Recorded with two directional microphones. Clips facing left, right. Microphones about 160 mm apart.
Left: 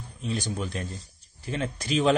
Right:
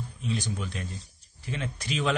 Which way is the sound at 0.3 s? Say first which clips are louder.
Left 2 dB; 35° left (ahead or behind).